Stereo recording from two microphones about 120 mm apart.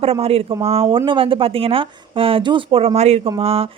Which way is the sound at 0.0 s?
55° right (ahead or behind).